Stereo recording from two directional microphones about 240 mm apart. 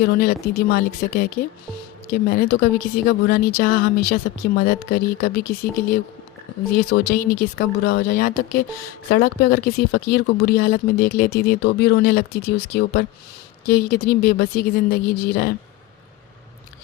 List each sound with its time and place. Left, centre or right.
0.0 s speech: left
6.7 s speech: left